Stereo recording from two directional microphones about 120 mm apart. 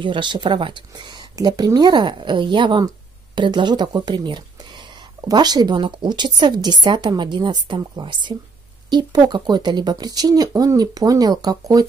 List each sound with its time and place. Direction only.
0.0 s speech: 40° right (ahead or behind)